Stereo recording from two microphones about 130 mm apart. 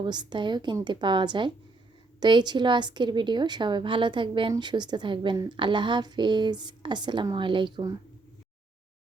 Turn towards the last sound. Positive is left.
turn(degrees=-35)  # may be behind; listen again after turning